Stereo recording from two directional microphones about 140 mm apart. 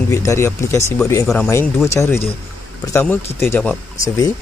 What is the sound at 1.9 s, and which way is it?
Speech, 20° left (ahead or behind).